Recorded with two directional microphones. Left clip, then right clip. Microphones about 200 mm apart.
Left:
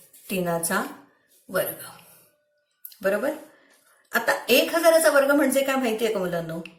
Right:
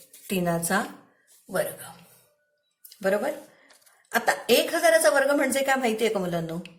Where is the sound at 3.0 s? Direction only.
45° right (ahead or behind).